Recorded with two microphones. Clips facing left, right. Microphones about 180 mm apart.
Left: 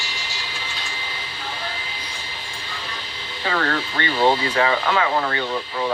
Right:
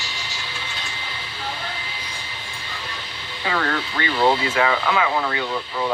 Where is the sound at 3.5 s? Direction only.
5° left (ahead or behind).